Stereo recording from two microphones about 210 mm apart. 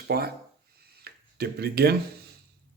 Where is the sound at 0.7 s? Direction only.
50° right (ahead or behind).